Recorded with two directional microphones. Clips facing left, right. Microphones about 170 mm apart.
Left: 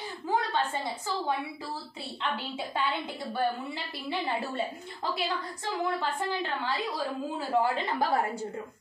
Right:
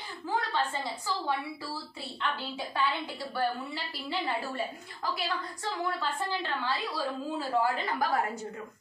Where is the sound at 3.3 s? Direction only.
20° left (ahead or behind).